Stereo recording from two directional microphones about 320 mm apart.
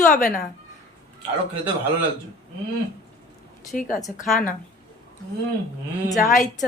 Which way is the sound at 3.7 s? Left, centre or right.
Left.